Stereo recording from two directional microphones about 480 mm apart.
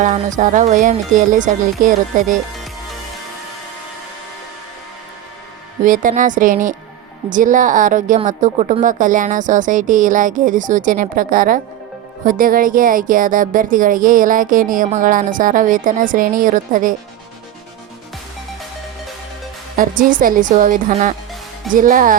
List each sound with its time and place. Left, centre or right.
0.0 s speech: centre
5.8 s speech: centre
19.7 s speech: centre